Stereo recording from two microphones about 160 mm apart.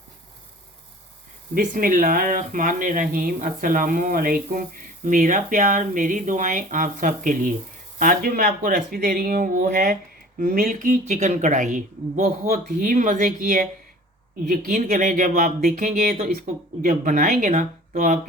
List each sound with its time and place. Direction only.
1.5 s speech: 60° right (ahead or behind)